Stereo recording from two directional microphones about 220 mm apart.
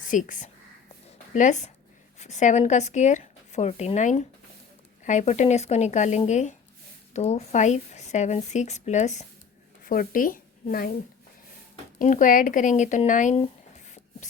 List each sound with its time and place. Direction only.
0.1 s speech: 35° left (ahead or behind)
11.9 s speech: 35° left (ahead or behind)
13.4 s a sound: 30° left (ahead or behind)